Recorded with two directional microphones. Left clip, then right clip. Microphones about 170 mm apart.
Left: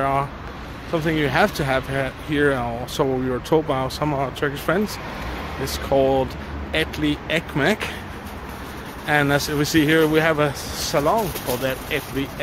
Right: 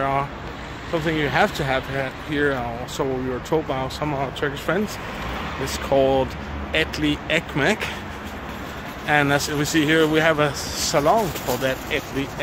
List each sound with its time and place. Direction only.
0.0 s vehicle: 30° left (ahead or behind)
0.9 s speech: 30° left (ahead or behind)
5.7 s speech: 15° left (ahead or behind)
9.0 s speech: 20° left (ahead or behind)